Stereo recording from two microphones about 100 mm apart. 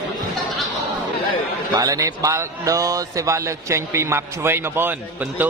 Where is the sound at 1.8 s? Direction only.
35° right (ahead or behind).